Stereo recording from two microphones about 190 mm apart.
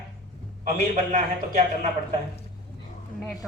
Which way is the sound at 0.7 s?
40° right (ahead or behind).